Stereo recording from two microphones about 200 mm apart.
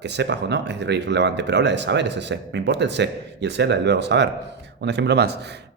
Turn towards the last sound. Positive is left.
turn(degrees=-55)  # may be behind; listen again after turning